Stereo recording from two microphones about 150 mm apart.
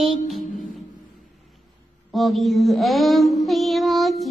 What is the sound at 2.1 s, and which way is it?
Mantra, centre (ahead or behind).